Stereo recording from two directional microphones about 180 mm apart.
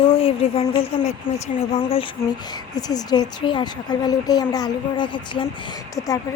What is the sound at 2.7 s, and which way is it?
A woman's voice, 20° left (ahead or behind).